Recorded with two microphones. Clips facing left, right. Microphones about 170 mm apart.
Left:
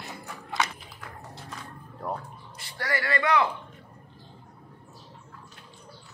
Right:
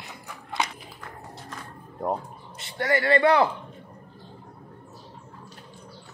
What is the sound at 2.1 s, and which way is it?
Speech, 25° right (ahead or behind).